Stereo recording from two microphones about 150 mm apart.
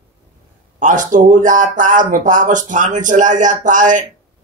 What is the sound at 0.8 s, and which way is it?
Speech, 60° right (ahead or behind).